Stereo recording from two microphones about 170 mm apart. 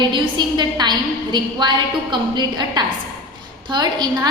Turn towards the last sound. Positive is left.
turn(degrees=-25)  # may be behind; listen again after turning